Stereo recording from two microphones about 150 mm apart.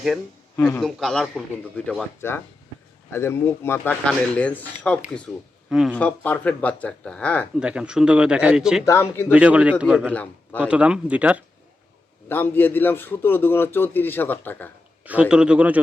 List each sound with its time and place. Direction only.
0.5 s a man's voice: 15° left (ahead or behind)
0.8 s a man's voice: 5° left (ahead or behind)
3.1 s a man's voice: 15° left (ahead or behind)
7.6 s speech: 5° right (ahead or behind)
8.8 s a man's voice: 20° left (ahead or behind)
9.3 s speech: 10° right (ahead or behind)
10.1 s a man's voice: 10° left (ahead or behind)
10.7 s speech: 5° right (ahead or behind)
12.3 s a man's voice: 15° left (ahead or behind)
15.0 s speech: 10° right (ahead or behind)